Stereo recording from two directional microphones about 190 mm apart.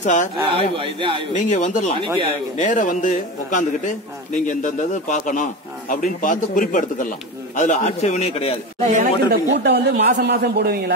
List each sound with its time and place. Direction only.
0.0 s a man's voice: 40° left (ahead or behind)
0.5 s a man's voice: 25° right (ahead or behind)
1.3 s a man's voice: 40° left (ahead or behind)
2.0 s a man's voice: 25° right (ahead or behind)
2.5 s a man's voice: 40° left (ahead or behind)
9.3 s a man's voice: 60° right (ahead or behind)